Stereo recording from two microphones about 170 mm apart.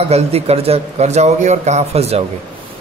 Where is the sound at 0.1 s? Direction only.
35° right (ahead or behind).